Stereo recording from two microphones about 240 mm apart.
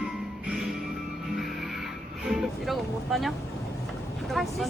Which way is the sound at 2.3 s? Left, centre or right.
Centre.